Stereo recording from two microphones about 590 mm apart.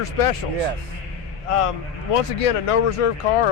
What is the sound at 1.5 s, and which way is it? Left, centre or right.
A man's voice, left.